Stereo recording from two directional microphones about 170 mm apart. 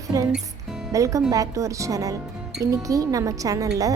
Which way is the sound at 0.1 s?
20° right (ahead or behind).